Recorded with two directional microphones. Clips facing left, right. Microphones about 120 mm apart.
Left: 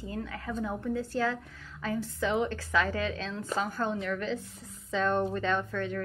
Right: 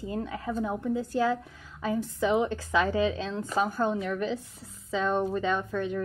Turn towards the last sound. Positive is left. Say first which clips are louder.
# right 2 dB
turn(degrees=-15)  # may be behind; listen again after turning